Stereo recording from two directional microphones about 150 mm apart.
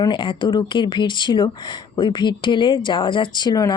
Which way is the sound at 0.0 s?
35° left (ahead or behind).